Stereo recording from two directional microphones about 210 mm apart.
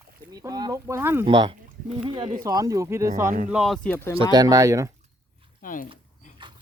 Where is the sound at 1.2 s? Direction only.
25° right (ahead or behind).